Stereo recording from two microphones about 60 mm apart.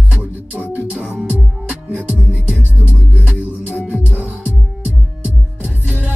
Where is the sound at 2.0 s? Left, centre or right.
Right.